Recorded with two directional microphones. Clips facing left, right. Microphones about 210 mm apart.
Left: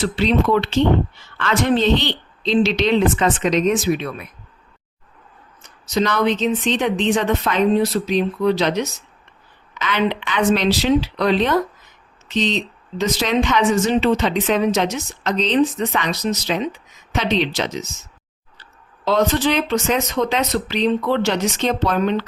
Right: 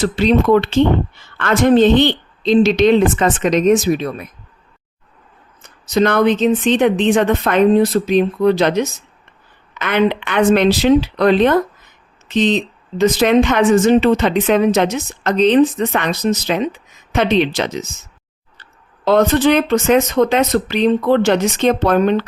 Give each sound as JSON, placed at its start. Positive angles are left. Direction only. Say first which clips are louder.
{"t": 0.0, "sound": "speech", "louder": "right 4 dB", "side_deg": -45}
{"t": 5.6, "sound": "speech", "louder": "right 5 dB", "side_deg": -55}
{"t": 19.0, "sound": "speech", "louder": "right 5 dB", "side_deg": -55}